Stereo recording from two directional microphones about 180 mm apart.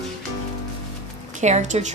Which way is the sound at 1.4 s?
40° right (ahead or behind).